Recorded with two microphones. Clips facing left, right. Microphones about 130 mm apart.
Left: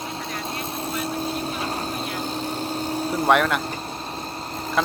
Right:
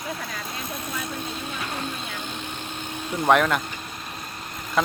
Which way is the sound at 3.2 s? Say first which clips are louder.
Even; centre (ahead or behind).